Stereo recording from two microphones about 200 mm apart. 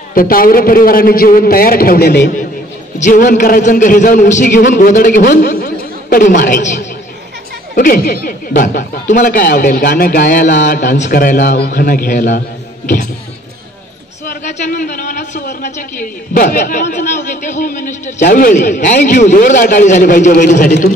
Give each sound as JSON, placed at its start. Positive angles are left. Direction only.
{"t": 0.1, "sound": "speech", "side_deg": 45}
{"t": 3.0, "sound": "a man's voice", "side_deg": 40}
{"t": 14.2, "sound": "a man's voice", "side_deg": 40}